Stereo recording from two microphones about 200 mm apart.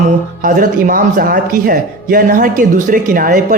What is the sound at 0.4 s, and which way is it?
Speech, 40° right (ahead or behind).